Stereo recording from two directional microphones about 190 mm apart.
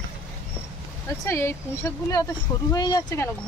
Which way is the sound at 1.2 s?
15° left (ahead or behind).